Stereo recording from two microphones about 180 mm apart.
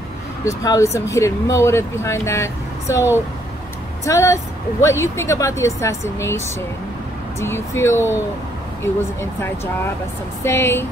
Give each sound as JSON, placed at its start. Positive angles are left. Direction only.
{"t": 0.5, "sound": "speech", "side_deg": 15}
{"t": 10.4, "sound": "speech", "side_deg": 15}